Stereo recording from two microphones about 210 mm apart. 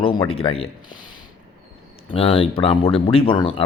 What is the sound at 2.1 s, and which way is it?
A man's voice, 25° left (ahead or behind).